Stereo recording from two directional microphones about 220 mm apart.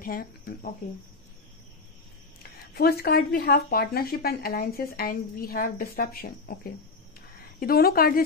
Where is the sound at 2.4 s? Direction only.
45° left (ahead or behind).